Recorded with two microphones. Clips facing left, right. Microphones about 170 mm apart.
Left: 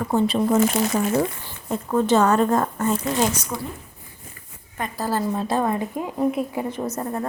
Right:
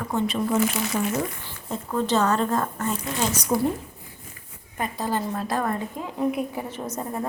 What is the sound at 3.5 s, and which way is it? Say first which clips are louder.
Speech: right 7 dB; 30° right (ahead or behind).